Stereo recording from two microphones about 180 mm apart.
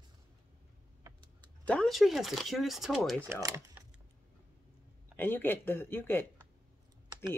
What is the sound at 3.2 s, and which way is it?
Speech, 15° right (ahead or behind).